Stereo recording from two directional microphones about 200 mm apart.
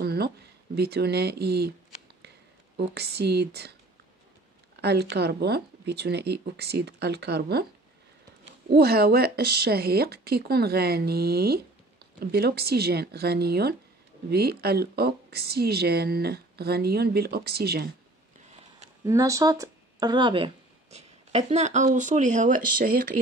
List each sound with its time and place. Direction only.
0.0 s a sound: 50° right (ahead or behind)
0.7 s speech: 55° right (ahead or behind)
2.8 s speech: 55° right (ahead or behind)
4.8 s speech: 55° right (ahead or behind)
8.6 s speech: 50° right (ahead or behind)
19.0 s speech: 15° right (ahead or behind); by 22.8 s 40° right (ahead or behind)